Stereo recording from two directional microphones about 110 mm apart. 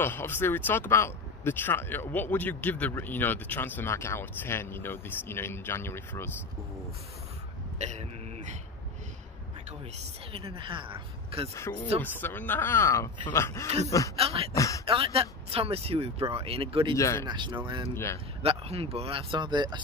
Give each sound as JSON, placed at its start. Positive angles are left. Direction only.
{"t": 0.0, "sound": "speech", "side_deg": 20}
{"t": 7.8, "sound": "speech", "side_deg": -90}
{"t": 10.3, "sound": "speech", "side_deg": -60}
{"t": 12.0, "sound": "speech", "side_deg": 15}
{"t": 14.1, "sound": "speech", "side_deg": -65}
{"t": 14.5, "sound": "speech", "side_deg": 30}
{"t": 14.9, "sound": "speech", "side_deg": -60}
{"t": 16.9, "sound": "speech", "side_deg": 25}
{"t": 17.3, "sound": "speech", "side_deg": -45}
{"t": 17.9, "sound": "speech", "side_deg": 25}
{"t": 18.4, "sound": "speech", "side_deg": -60}